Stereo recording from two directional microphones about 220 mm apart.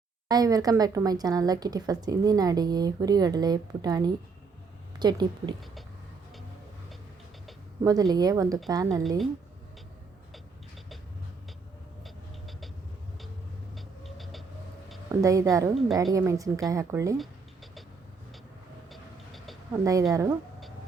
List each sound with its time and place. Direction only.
0.3 s a woman's voice: 15° right (ahead or behind)
7.9 s a woman's voice: 15° right (ahead or behind)
9.0 s speech: centre (ahead or behind)
12.0 s vehicle: centre (ahead or behind)
13.7 s a sound: centre (ahead or behind)
15.1 s a woman's voice: 15° right (ahead or behind)
18.9 s vehicle: centre (ahead or behind)
19.7 s a woman's voice: 15° right (ahead or behind)